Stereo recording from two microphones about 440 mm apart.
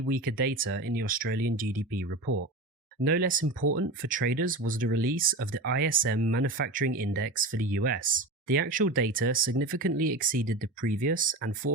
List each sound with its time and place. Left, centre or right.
0.1 s speech: centre